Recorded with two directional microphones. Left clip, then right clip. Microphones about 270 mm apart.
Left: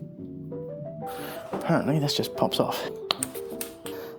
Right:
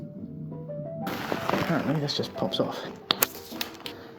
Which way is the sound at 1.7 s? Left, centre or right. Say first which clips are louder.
Left 3 dB; left.